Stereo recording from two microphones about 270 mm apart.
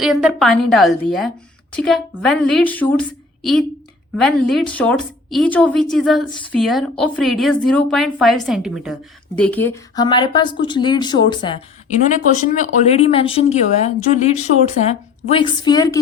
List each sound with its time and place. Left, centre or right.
0.0 s a woman's voice: centre